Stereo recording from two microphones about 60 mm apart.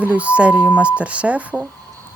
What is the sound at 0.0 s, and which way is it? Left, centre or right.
Speech, right.